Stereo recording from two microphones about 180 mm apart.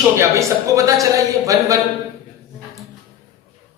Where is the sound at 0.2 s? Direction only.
15° right (ahead or behind).